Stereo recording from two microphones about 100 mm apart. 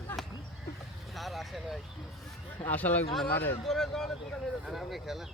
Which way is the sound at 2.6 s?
15° left (ahead or behind).